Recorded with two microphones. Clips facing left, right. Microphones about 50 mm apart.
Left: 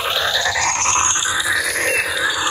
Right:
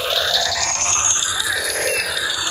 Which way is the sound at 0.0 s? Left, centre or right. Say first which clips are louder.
Left 1 dB; left.